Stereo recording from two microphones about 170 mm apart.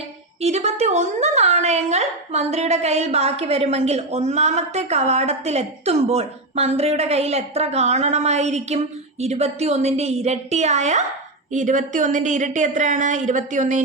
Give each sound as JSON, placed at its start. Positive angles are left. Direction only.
{"t": 0.4, "sound": "a woman's voice", "side_deg": -40}